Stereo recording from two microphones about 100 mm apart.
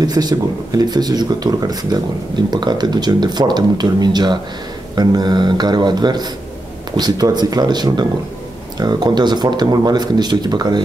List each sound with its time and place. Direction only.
0.0 s speech: 40° right (ahead or behind)